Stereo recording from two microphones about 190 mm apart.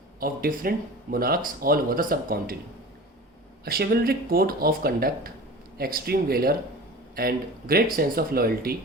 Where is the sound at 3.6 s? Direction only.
55° right (ahead or behind).